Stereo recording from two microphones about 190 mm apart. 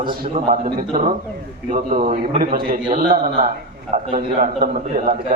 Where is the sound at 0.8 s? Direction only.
45° right (ahead or behind).